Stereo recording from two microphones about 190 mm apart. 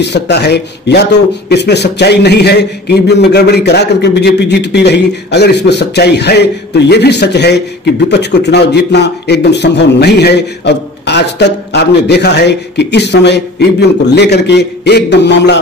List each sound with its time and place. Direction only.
0.0 s a man's voice: 65° left (ahead or behind)